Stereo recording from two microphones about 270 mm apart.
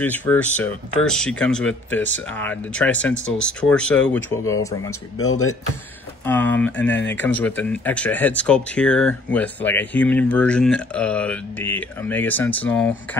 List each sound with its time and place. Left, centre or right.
0.0 s speech: centre
5.3 s speech: left
6.2 s speech: centre
6.9 s speech: left
7.2 s speech: centre